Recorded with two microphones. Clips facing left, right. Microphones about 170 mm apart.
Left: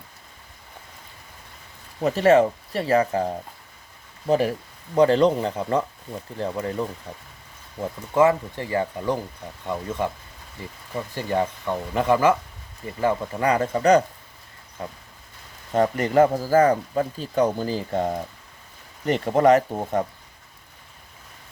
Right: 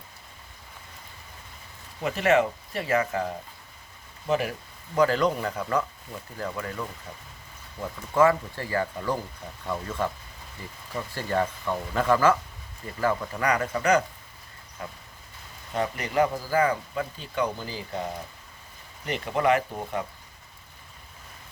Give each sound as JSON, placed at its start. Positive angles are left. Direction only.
{"t": 2.0, "sound": "speech", "side_deg": 35}
{"t": 15.7, "sound": "speech", "side_deg": 45}